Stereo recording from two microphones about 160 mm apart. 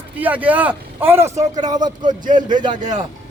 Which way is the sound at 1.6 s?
25° right (ahead or behind).